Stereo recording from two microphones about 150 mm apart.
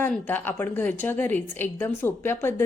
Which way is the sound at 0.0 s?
10° left (ahead or behind).